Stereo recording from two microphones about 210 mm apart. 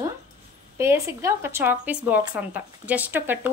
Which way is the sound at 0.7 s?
15° right (ahead or behind).